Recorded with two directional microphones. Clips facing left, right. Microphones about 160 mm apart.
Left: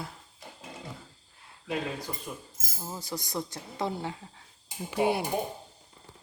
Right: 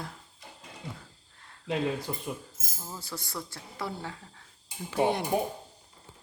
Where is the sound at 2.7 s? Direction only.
20° left (ahead or behind).